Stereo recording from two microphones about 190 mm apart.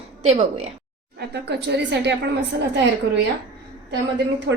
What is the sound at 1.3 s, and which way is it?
Speech, 60° right (ahead or behind).